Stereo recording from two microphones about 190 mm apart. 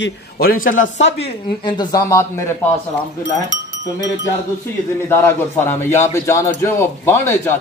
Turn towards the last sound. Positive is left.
turn(degrees=15)  # may be behind; listen again after turning